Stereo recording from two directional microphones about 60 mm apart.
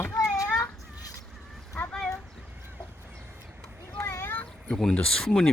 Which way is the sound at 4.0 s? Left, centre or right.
Left.